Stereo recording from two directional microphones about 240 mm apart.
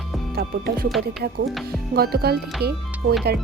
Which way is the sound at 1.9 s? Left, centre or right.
Right.